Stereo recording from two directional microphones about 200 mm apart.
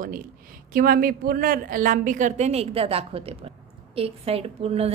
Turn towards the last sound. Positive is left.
turn(degrees=-30)  # may be behind; listen again after turning